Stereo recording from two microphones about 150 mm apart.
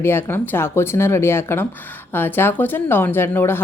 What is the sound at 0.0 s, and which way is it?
Speech, 15° left (ahead or behind).